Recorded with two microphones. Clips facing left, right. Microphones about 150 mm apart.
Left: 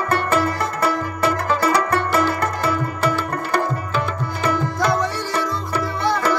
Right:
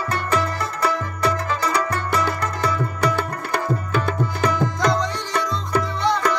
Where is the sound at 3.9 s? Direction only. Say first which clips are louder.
Right 1 dB; 55° right (ahead or behind).